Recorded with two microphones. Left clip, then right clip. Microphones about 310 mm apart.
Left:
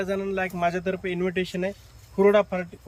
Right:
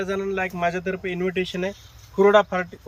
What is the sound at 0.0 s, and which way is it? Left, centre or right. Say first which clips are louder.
Speech: right 2 dB; centre.